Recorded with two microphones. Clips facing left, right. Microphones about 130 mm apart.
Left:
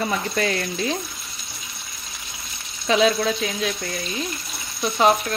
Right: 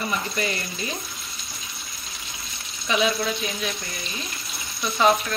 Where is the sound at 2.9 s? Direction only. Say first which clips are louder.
Left 5 dB; 80° left.